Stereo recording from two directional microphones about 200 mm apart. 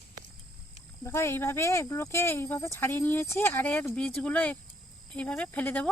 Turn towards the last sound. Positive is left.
turn(degrees=10)  # may be behind; listen again after turning